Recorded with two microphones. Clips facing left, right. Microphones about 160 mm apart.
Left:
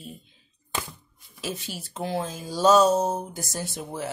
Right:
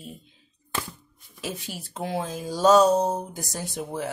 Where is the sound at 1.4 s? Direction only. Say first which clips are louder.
Even; 15° right (ahead or behind).